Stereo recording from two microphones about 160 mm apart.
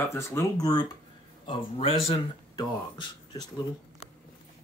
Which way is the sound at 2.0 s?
25° left (ahead or behind).